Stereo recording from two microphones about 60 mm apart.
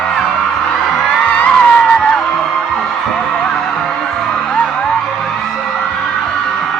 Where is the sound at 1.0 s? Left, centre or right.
Left.